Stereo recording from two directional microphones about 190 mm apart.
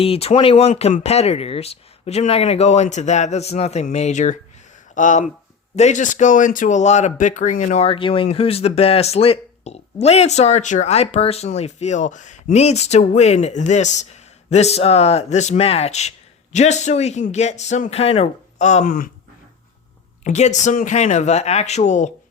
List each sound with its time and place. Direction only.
0.0 s speech: 30° left (ahead or behind); by 19.1 s 45° left (ahead or behind)
20.2 s speech: 40° left (ahead or behind)